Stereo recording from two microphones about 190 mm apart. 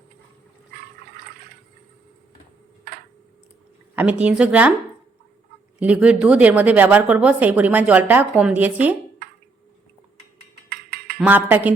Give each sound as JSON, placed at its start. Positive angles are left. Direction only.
{"t": 3.9, "sound": "a woman's voice", "side_deg": -5}
{"t": 5.8, "sound": "a woman's voice", "side_deg": -5}
{"t": 10.7, "sound": "a sound", "side_deg": -50}
{"t": 11.2, "sound": "a woman's voice", "side_deg": -10}